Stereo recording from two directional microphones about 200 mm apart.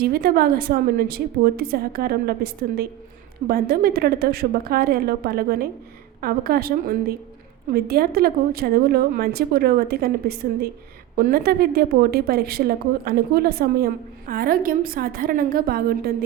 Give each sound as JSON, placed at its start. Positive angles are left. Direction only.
{"t": 0.0, "sound": "a woman's voice", "side_deg": -50}